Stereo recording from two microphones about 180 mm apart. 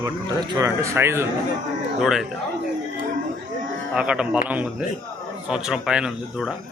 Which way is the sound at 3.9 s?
5° right (ahead or behind).